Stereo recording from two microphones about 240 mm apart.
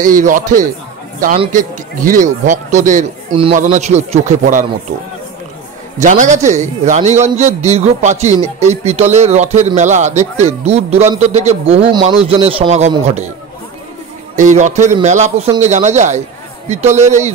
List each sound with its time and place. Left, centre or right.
0.0 s a man's voice: right
5.9 s a man's voice: right
14.4 s a man's voice: right